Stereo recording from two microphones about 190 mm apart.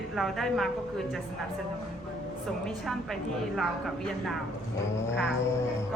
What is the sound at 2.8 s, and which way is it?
Speech, centre (ahead or behind).